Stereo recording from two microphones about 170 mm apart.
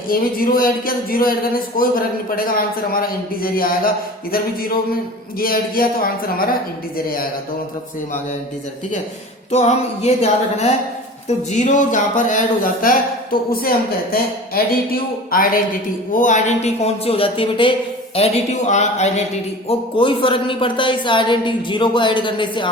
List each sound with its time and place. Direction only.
0.1 s speech: 60° left (ahead or behind)
5.4 s speech: 60° left (ahead or behind)
9.5 s speech: 40° left (ahead or behind)
19.6 s speech: 30° left (ahead or behind)